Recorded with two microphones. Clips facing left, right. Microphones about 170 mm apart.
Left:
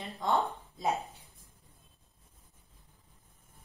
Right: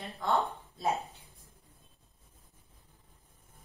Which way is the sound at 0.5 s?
15° left (ahead or behind).